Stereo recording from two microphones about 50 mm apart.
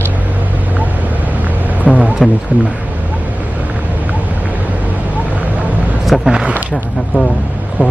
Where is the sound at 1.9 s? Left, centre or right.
Centre.